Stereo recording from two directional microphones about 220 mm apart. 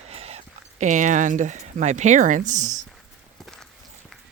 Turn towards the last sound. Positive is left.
turn(degrees=0)  # may be behind; listen again after turning